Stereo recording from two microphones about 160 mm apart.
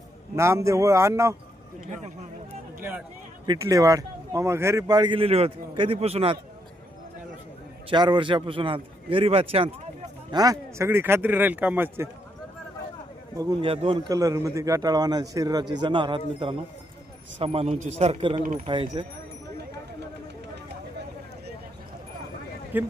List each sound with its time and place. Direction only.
0.3 s speech: 15° right (ahead or behind)
3.4 s speech: 25° right (ahead or behind); by 6.3 s 40° right (ahead or behind)
7.9 s a man's voice: 30° right (ahead or behind)
10.3 s speech: 20° right (ahead or behind)
13.3 s speech: 25° right (ahead or behind)
13.7 s a man's voice: 35° right (ahead or behind)
14.1 s a man's voice: 20° right (ahead or behind)
22.7 s speech: 10° right (ahead or behind)